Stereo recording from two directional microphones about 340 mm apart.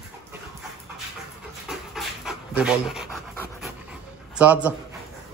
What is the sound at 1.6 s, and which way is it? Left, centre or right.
Pant, centre.